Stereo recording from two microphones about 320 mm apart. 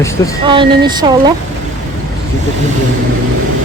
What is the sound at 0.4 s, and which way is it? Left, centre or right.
Speech, centre.